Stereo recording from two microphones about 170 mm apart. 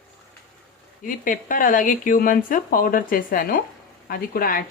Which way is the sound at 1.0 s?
55° left (ahead or behind).